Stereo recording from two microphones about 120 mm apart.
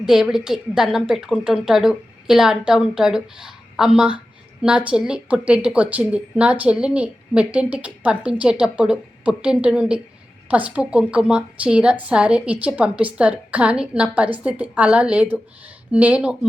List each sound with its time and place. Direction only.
0.0 s a woman's voice: 5° right (ahead or behind)